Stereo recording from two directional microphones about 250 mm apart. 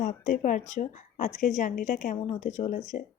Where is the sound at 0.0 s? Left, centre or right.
Left.